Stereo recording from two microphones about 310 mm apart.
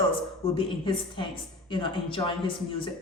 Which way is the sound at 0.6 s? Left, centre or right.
Centre.